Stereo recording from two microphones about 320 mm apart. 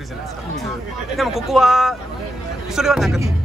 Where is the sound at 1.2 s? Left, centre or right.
Centre.